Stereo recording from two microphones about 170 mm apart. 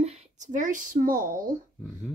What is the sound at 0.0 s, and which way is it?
Speech, 40° right (ahead or behind).